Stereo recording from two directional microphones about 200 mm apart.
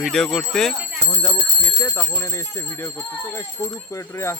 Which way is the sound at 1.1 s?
5° left (ahead or behind).